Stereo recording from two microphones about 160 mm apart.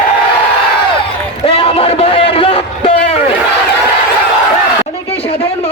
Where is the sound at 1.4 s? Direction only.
35° left (ahead or behind).